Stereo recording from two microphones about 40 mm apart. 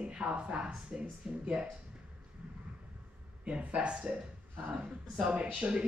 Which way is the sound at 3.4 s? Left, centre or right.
Right.